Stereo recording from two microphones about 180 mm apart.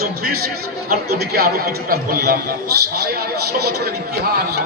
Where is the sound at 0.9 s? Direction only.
55° right (ahead or behind).